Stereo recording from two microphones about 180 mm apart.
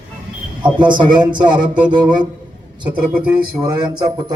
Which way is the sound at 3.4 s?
25° right (ahead or behind).